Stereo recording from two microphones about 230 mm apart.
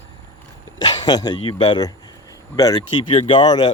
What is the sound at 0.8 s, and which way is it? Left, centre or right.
Speech, centre.